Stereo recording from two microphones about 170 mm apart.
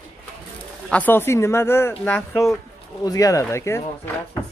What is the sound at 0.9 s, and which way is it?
Speech, 10° left (ahead or behind).